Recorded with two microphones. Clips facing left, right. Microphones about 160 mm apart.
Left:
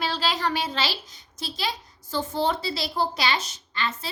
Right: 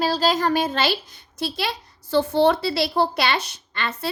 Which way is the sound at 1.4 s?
65° right (ahead or behind).